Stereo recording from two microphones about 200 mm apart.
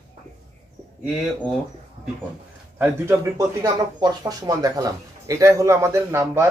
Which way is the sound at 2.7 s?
10° right (ahead or behind).